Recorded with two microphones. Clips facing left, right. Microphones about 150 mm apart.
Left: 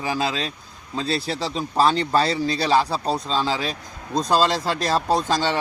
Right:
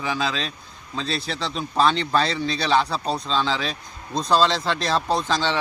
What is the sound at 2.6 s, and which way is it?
Speech, 5° left (ahead or behind).